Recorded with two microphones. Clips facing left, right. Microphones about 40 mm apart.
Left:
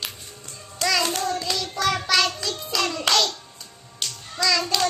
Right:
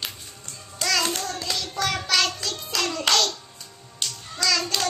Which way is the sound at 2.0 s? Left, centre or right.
Centre.